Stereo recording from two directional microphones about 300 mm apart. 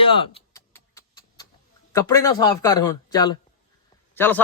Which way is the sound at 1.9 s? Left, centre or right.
Centre.